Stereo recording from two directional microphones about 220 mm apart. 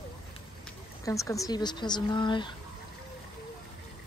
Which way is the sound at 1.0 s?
15° left (ahead or behind).